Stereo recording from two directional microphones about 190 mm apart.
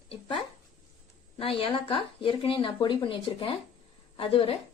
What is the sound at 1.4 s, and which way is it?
A woman's voice, 30° left (ahead or behind).